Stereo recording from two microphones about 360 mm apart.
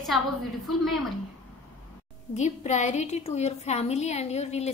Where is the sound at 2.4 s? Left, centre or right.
Centre.